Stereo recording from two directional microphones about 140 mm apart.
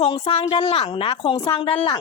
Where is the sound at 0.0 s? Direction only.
40° left (ahead or behind).